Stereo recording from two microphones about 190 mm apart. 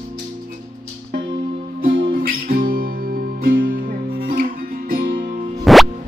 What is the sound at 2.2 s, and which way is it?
Music, 50° right (ahead or behind).